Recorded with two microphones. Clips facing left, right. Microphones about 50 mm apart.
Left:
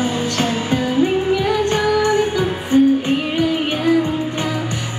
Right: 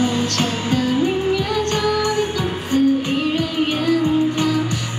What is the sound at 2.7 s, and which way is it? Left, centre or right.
Music, left.